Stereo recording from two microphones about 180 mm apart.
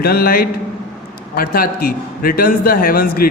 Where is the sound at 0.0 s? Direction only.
55° left (ahead or behind).